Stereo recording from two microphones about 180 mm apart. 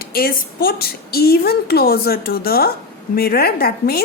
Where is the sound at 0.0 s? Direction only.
55° left (ahead or behind).